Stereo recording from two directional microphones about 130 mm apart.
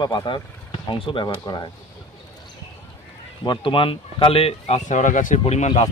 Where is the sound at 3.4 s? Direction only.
40° left (ahead or behind); by 5.8 s 55° left (ahead or behind).